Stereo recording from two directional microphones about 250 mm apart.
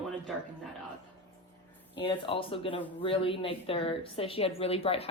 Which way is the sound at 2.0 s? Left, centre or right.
Left.